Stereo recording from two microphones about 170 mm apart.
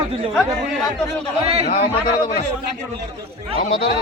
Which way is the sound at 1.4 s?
35° right (ahead or behind).